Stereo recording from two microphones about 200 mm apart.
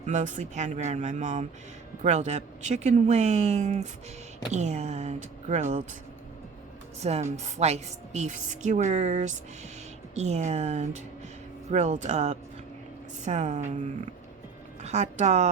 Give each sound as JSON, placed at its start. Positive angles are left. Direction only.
{"t": 0.0, "sound": "a woman's voice", "side_deg": -35}
{"t": 7.0, "sound": "a woman's voice", "side_deg": -35}